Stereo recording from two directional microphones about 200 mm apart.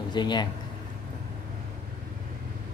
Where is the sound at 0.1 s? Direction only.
20° left (ahead or behind).